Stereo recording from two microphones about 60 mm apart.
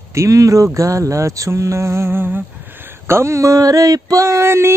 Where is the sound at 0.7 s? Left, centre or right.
Right.